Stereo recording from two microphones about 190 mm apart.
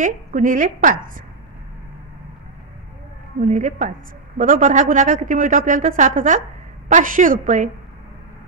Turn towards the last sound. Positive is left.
turn(degrees=-40)  # may be behind; listen again after turning